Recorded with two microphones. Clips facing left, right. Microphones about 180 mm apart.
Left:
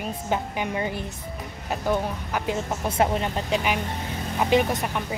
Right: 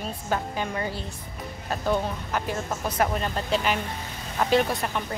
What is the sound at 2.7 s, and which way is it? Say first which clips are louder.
A woman's voice: left 2 dB; 25° left (ahead or behind).